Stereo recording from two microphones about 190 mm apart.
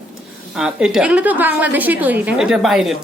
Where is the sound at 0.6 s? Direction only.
5° right (ahead or behind).